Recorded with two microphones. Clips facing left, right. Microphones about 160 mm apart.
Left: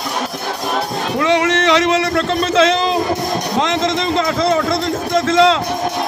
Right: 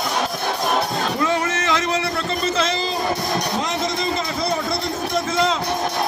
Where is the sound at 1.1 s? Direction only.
85° left.